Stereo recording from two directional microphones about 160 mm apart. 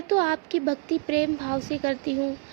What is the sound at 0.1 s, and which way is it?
A woman's voice, 35° right (ahead or behind).